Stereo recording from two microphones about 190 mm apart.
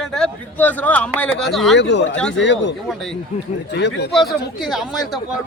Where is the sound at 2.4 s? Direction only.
70° left (ahead or behind).